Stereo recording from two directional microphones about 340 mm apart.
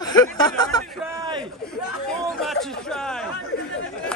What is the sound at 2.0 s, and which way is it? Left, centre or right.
Chatter, centre.